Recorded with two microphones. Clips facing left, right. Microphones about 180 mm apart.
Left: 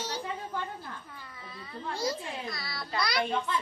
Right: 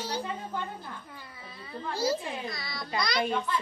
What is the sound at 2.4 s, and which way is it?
Speech, centre (ahead or behind).